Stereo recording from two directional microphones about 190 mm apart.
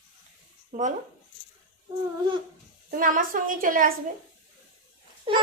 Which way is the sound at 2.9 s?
45° right (ahead or behind).